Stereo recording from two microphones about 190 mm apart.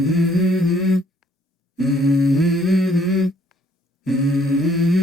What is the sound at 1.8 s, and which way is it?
Humming, centre (ahead or behind).